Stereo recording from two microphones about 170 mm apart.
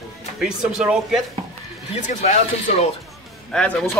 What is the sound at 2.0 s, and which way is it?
Speech, 45° left (ahead or behind).